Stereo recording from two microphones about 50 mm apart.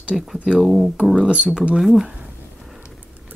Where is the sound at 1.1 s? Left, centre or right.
Centre.